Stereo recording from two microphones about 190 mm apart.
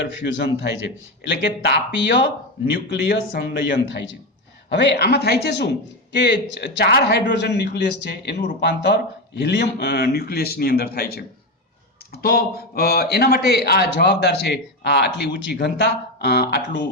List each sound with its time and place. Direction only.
0.2 s a man's voice: 70° left (ahead or behind)